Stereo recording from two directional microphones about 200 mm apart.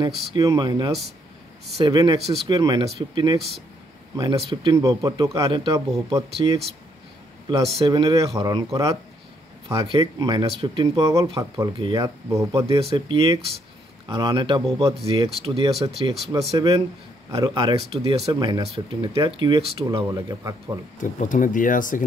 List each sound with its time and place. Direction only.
0.3 s speech: 20° right (ahead or behind)
3.3 s speech: centre (ahead or behind)
4.2 s speech: 25° right (ahead or behind)
7.8 s speech: 20° right (ahead or behind)
9.7 s speech: 20° right (ahead or behind)
21.0 s speech: 40° left (ahead or behind)